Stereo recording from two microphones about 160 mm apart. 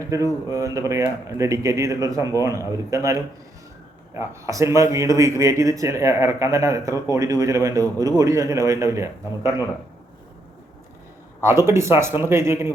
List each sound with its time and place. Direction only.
0.4 s a man's voice: 20° right (ahead or behind)
11.4 s speech: 15° right (ahead or behind)